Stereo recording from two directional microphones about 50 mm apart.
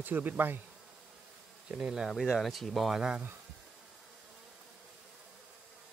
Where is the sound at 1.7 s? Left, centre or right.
Centre.